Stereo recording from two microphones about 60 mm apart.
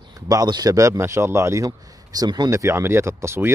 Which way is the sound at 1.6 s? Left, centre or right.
Right.